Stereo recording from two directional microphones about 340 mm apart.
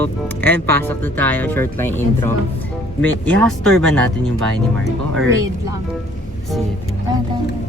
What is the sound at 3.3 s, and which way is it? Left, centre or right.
Speech, centre.